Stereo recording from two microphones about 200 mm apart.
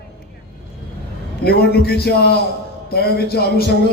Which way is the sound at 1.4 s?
50° left (ahead or behind).